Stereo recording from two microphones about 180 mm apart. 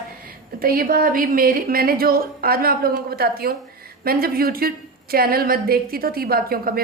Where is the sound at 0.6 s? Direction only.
55° right (ahead or behind).